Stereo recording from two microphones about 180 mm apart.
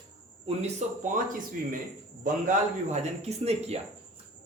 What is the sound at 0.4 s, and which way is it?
Speech, 45° right (ahead or behind).